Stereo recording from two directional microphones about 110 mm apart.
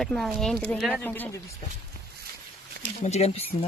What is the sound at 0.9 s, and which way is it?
Speech, 15° left (ahead or behind).